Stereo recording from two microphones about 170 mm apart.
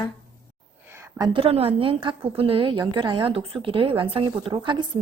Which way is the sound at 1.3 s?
35° right (ahead or behind).